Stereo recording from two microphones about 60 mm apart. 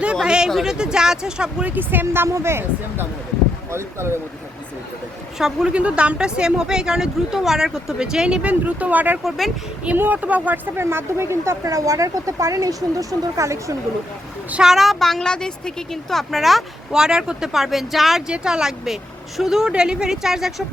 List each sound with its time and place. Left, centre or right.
0.2 s speech: centre
1.6 s speech: right
5.4 s speech: centre
5.7 s speech: right
10.8 s speech: right
11.6 s speech: right
14.6 s speech: centre
16.9 s speech: centre
17.5 s speech: centre